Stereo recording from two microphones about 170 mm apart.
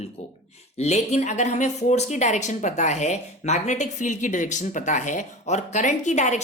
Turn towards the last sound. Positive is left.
turn(degrees=40)  # may be behind; listen again after turning